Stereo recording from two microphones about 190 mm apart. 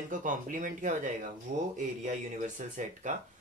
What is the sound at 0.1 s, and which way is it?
Speech, 45° right (ahead or behind).